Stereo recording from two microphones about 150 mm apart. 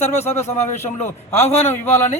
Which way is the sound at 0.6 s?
50° left (ahead or behind).